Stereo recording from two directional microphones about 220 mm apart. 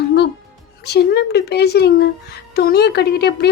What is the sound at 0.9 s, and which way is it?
A woman's voice, 50° left (ahead or behind).